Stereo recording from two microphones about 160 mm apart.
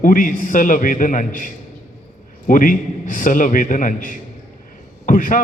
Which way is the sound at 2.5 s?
60° left (ahead or behind).